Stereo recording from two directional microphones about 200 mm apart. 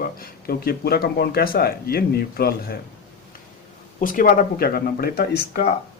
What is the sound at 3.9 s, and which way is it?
Speech, 40° left (ahead or behind).